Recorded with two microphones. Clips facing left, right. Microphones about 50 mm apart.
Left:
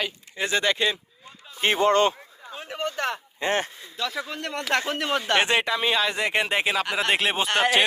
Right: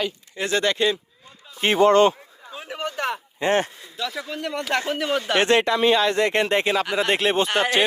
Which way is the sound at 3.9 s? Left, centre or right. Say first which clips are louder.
Right 1 dB; centre.